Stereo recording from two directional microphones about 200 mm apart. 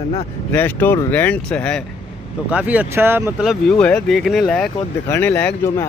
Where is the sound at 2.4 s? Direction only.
5° right (ahead or behind).